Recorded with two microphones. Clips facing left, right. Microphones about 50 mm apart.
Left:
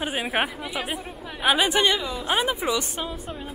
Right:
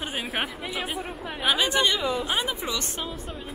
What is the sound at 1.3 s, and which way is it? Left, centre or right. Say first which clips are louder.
A woman's voice: left 3 dB; centre.